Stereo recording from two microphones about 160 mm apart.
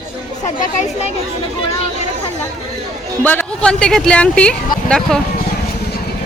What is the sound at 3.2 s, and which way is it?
Speech, 10° left (ahead or behind).